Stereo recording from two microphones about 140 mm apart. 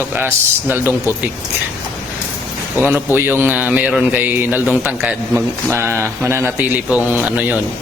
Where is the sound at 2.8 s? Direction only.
15° right (ahead or behind).